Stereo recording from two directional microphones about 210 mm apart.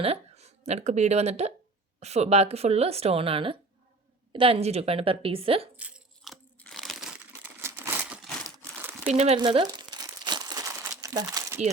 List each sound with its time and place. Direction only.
0.0 s speech: 30° right (ahead or behind)
5.7 s crunch: 5° right (ahead or behind)
7.6 s crumpling: 10° right (ahead or behind)
9.0 s crumpling: 30° right (ahead or behind)